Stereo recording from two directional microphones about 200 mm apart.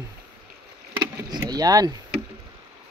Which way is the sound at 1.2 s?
20° right (ahead or behind).